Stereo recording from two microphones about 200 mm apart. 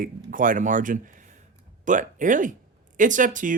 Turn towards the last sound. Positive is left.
turn(degrees=-40)  # may be behind; listen again after turning